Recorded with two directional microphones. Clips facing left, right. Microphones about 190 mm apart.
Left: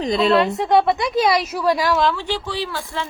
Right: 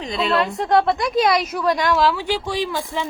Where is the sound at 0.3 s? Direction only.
Centre (ahead or behind).